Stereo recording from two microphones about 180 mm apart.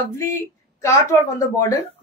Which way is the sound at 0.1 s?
15° left (ahead or behind).